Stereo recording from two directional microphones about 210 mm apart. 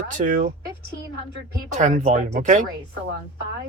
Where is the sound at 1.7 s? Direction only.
35° right (ahead or behind).